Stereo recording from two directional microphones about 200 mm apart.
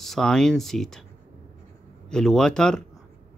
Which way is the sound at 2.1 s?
5° left (ahead or behind).